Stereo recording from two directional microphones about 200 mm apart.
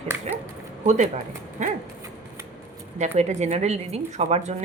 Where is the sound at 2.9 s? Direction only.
35° right (ahead or behind).